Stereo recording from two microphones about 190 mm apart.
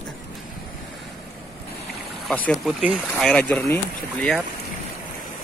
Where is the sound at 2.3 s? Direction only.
5° left (ahead or behind).